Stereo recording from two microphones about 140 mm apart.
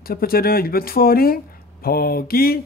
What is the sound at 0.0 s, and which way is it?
Speech, 90° left.